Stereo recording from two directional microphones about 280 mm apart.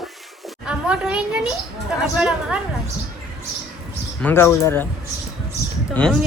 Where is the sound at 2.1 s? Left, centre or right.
Centre.